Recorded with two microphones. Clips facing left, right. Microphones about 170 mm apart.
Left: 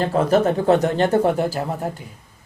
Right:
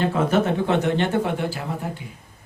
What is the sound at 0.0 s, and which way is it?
Speech, 40° left (ahead or behind).